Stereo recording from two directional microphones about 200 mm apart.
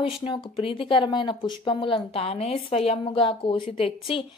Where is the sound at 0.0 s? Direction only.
25° left (ahead or behind).